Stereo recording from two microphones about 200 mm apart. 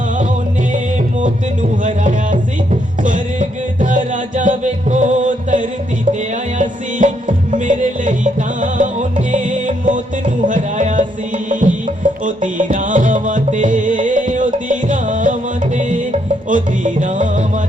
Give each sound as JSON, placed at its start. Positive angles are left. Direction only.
{"t": 1.8, "sound": "music", "side_deg": -40}
{"t": 3.8, "sound": "music", "side_deg": -40}